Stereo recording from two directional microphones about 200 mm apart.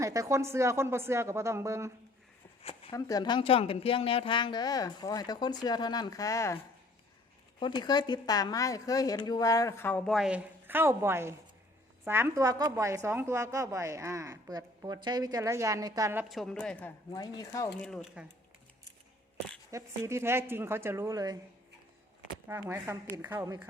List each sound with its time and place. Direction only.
0.0 s a woman's voice: 15° right (ahead or behind)
2.9 s speech: 15° left (ahead or behind)
7.6 s a woman's voice: 25° left (ahead or behind)
10.1 s a woman's voice: 5° right (ahead or behind)
16.3 s a woman's voice: centre (ahead or behind)
17.1 s a woman's voice: 20° left (ahead or behind)
17.7 s a woman's voice: centre (ahead or behind)
19.7 s a woman's voice: 15° right (ahead or behind)
22.4 s a woman's voice: 10° right (ahead or behind)